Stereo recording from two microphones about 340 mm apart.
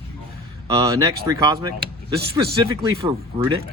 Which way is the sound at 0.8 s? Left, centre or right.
Centre.